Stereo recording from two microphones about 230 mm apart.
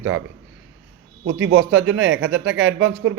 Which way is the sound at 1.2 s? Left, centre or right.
Right.